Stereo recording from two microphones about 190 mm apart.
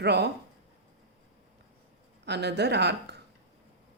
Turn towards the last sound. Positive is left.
turn(degrees=-60)  # may be behind; listen again after turning